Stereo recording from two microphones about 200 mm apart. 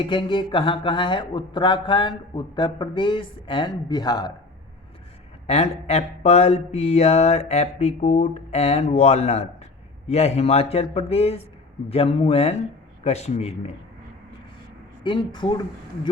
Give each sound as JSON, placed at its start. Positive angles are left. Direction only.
{"t": 0.0, "sound": "speech", "side_deg": 25}
{"t": 5.5, "sound": "mantra", "side_deg": 30}
{"t": 15.0, "sound": "speech", "side_deg": 25}